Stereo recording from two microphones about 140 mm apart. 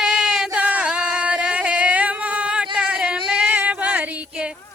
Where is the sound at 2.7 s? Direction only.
5° right (ahead or behind).